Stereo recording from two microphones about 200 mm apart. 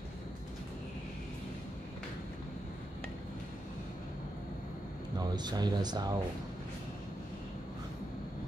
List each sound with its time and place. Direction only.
5.1 s speech: 20° right (ahead or behind)